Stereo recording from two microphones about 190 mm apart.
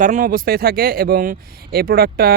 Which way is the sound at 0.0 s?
45° right (ahead or behind).